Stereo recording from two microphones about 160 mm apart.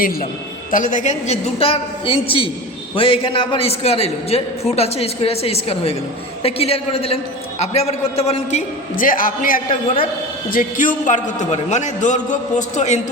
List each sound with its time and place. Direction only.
0.7 s a woman's voice: 55° left (ahead or behind)
9.0 s a man's voice: 60° left (ahead or behind)